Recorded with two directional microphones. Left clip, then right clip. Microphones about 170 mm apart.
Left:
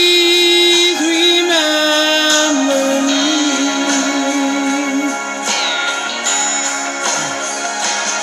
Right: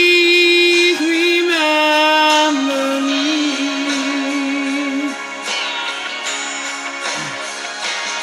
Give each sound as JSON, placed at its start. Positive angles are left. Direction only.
{"t": 0.0, "sound": "music", "side_deg": 0}
{"t": 3.1, "sound": "music", "side_deg": 50}